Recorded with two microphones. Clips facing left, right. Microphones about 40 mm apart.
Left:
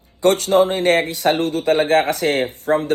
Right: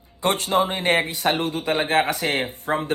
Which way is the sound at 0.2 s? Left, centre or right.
Right.